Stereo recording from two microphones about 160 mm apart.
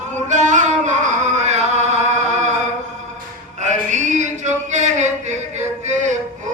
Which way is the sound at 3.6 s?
50° right (ahead or behind).